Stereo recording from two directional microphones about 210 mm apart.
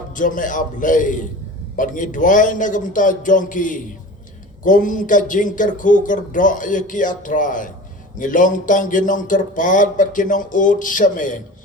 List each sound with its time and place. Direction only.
0.1 s a man's voice: 40° left (ahead or behind)